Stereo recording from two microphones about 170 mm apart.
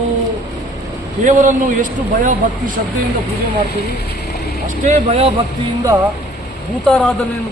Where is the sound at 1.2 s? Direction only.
45° right (ahead or behind).